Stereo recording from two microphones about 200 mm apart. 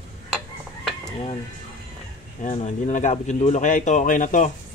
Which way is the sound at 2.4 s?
40° left (ahead or behind).